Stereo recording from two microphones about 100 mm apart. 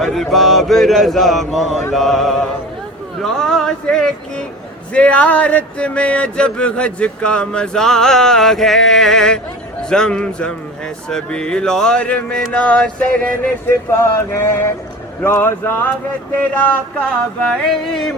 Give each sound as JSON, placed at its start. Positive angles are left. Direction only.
{"t": 0.0, "sound": "speech", "side_deg": 0}